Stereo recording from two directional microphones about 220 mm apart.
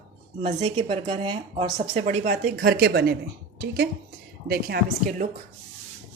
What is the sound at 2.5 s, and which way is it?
Speech, 50° right (ahead or behind).